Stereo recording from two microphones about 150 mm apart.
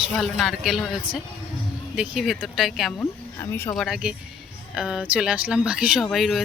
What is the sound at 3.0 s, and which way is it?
Speech, 15° left (ahead or behind).